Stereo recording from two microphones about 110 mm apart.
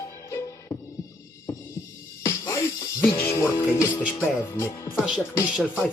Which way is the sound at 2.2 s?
25° left (ahead or behind).